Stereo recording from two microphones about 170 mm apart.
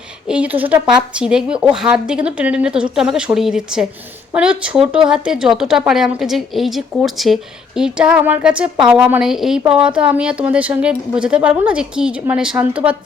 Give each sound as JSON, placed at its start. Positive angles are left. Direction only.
{"t": 0.3, "sound": "a woman's voice", "side_deg": -10}